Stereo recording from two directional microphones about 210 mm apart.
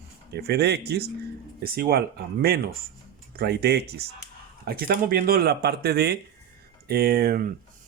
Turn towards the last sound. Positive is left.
turn(degrees=-45)  # may be behind; listen again after turning